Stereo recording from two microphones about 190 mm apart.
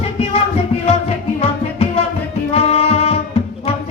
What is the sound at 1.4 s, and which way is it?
Music, 30° left (ahead or behind).